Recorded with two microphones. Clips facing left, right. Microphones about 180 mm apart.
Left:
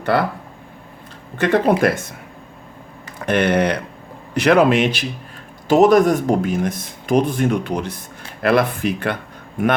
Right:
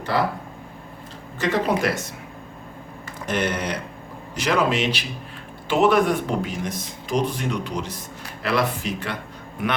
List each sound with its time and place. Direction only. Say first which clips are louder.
0.1 s speech: left 3 dB; 60° left (ahead or behind)
1.4 s speech: left 6 dB; 55° left (ahead or behind)
3.2 s speech: left 8 dB; 60° left (ahead or behind)
5.6 s speech: left 6 dB; 40° left (ahead or behind); by 9.1 s 55° left (ahead or behind)